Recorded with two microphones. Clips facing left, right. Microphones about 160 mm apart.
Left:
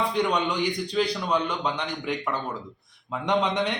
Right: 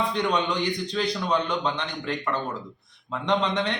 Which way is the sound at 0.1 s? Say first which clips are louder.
Even; 10° left (ahead or behind).